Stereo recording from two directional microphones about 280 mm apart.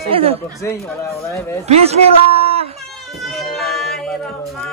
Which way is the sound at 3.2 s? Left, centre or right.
Centre.